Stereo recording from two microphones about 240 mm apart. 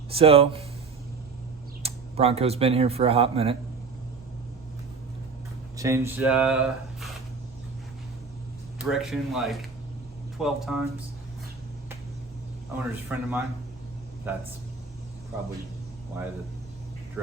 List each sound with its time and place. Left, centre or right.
0.1 s speech: right
1.8 s speech: right
5.7 s speech: centre
8.8 s speech: centre
12.7 s a man's voice: centre